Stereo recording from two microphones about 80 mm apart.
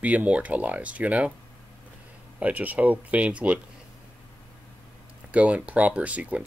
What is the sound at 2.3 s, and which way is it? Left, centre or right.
Speech, centre.